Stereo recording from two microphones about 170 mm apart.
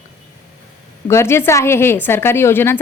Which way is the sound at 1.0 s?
15° left (ahead or behind).